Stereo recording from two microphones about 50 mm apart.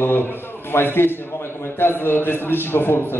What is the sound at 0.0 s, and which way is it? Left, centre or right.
A man's voice, left.